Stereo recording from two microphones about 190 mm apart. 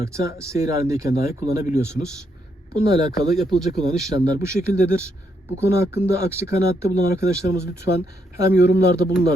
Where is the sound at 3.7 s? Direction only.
Centre (ahead or behind).